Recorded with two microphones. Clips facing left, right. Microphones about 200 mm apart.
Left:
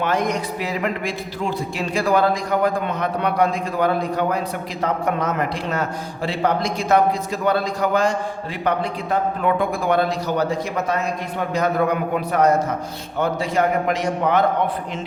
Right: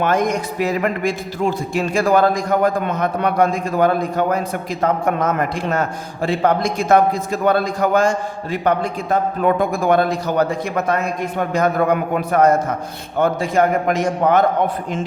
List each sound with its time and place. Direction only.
0.0 s a man's voice: 50° right (ahead or behind)
11.5 s a man's voice: 50° right (ahead or behind)